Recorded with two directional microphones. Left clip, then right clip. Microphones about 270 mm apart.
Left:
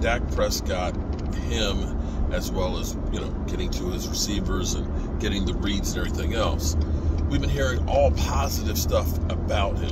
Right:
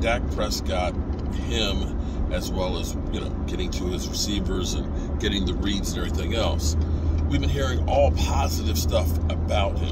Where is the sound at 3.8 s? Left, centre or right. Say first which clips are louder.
Even; centre.